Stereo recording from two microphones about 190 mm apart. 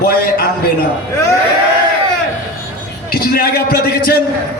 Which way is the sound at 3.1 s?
50° left (ahead or behind).